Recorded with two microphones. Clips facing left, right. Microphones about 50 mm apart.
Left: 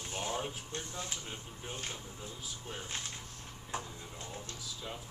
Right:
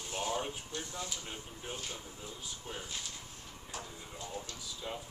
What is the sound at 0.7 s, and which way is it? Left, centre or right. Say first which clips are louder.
Speech: right 1 dB; left.